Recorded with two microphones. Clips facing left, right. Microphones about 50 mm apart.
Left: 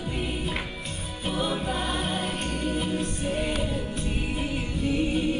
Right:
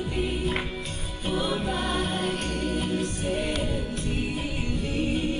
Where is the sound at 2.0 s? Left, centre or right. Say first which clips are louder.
Right 1 dB; left.